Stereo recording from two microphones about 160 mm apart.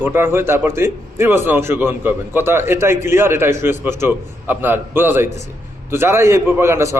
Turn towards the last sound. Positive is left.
turn(degrees=-20)  # may be behind; listen again after turning